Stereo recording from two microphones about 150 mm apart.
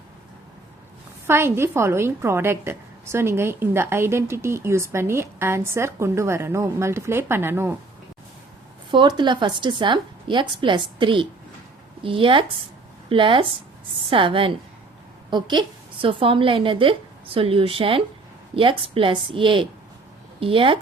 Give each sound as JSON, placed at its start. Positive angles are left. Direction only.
{"t": 1.3, "sound": "a woman's voice", "side_deg": -15}
{"t": 8.9, "sound": "a woman's voice", "side_deg": -30}